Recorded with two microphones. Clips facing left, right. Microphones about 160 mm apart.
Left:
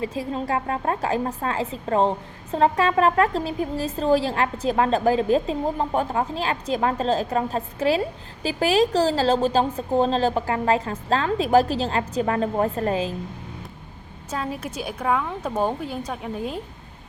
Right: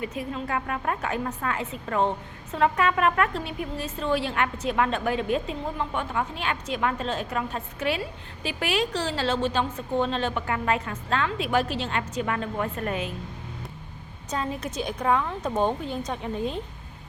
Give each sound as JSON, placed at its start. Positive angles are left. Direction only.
{"t": 0.0, "sound": "a woman's voice", "side_deg": 30}
{"t": 14.3, "sound": "speech", "side_deg": 5}